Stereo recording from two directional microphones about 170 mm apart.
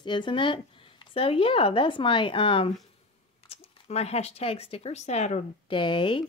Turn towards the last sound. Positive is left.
turn(degrees=30)  # may be behind; listen again after turning